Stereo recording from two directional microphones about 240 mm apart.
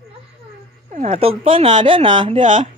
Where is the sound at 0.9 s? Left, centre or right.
Right.